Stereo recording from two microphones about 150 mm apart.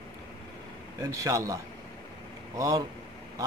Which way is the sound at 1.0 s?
20° right (ahead or behind).